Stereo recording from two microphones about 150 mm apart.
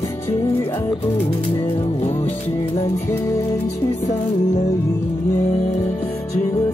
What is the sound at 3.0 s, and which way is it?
Music, 20° left (ahead or behind).